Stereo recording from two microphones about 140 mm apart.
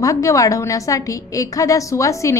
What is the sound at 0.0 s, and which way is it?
A woman's voice, 25° left (ahead or behind).